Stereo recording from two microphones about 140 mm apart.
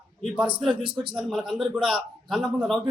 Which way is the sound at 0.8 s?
35° right (ahead or behind).